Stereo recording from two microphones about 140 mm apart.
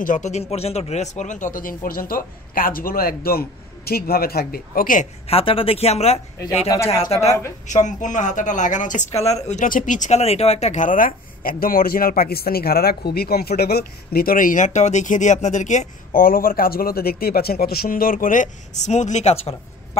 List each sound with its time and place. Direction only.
0.0 s speech: 65° left (ahead or behind); by 5.0 s 85° left
5.3 s speech: 40° left (ahead or behind)
6.7 s speech: 25° left (ahead or behind)
7.1 s speech: 50° left (ahead or behind)
7.6 s speech: 60° left (ahead or behind)
9.5 s speech: 65° left (ahead or behind)
16.1 s speech: 90° left; by 20.0 s 45° left (ahead or behind)